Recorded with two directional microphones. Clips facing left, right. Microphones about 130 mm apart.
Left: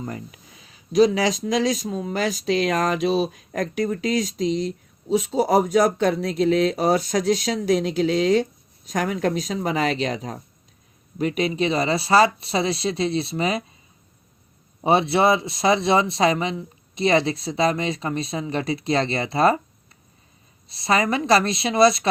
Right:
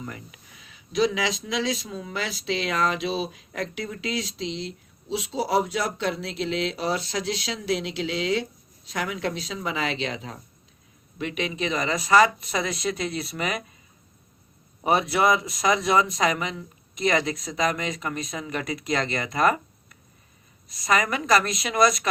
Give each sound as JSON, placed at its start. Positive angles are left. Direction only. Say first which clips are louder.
{"t": 0.0, "sound": "speech", "louder": "left 6 dB", "side_deg": 35}
{"t": 14.8, "sound": "speech", "louder": "left 3 dB", "side_deg": 30}